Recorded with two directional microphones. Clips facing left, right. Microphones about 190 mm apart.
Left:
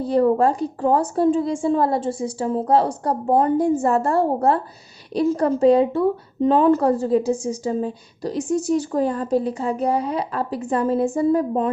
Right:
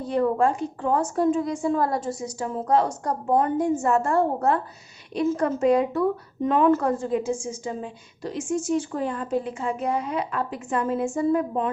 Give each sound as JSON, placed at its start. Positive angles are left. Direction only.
{"t": 0.0, "sound": "a woman's voice", "side_deg": 35}